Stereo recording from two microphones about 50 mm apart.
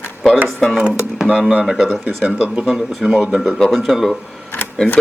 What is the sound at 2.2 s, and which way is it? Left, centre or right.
Speech, right.